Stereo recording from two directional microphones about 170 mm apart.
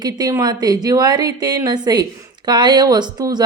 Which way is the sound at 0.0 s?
20° right (ahead or behind).